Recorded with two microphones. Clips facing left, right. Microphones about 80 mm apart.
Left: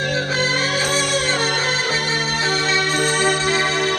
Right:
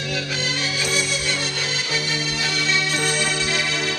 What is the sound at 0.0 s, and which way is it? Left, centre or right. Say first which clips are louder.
Music: left 6 dB; left.